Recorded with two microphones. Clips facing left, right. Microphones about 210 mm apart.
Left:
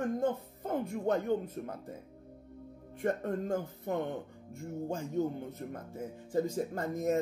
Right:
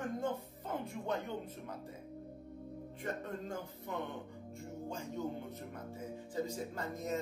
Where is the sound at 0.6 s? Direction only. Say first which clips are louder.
Left 7 dB; 45° left (ahead or behind).